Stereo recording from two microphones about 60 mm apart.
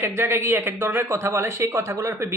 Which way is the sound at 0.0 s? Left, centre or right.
Right.